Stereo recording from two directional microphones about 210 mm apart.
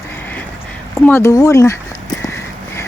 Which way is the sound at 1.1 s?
15° left (ahead or behind).